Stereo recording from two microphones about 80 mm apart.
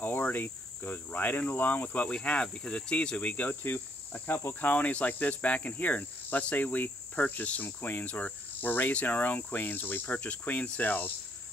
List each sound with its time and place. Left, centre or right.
0.0 s cricket: left